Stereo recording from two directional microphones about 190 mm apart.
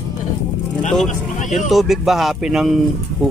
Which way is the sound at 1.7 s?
Centre (ahead or behind).